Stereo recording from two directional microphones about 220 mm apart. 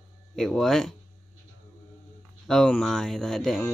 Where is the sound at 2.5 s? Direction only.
Centre (ahead or behind).